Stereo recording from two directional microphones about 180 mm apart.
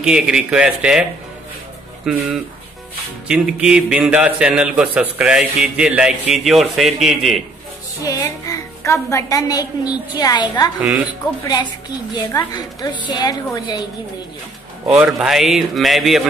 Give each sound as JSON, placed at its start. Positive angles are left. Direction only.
{"t": 0.0, "sound": "a man's voice", "side_deg": -5}
{"t": 2.1, "sound": "a man's voice", "side_deg": -5}
{"t": 3.3, "sound": "a man's voice", "side_deg": -5}
{"t": 8.0, "sound": "a woman's voice", "side_deg": 20}
{"t": 10.8, "sound": "speech", "side_deg": -5}
{"t": 11.4, "sound": "a woman's voice", "side_deg": 25}
{"t": 14.9, "sound": "a man's voice", "side_deg": -5}